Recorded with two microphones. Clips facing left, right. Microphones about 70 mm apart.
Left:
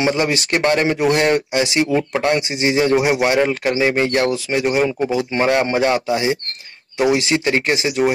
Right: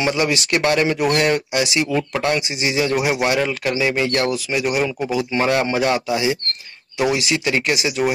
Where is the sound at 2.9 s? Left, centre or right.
Centre.